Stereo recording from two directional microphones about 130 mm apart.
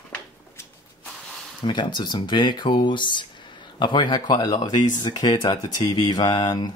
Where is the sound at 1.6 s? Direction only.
35° left (ahead or behind).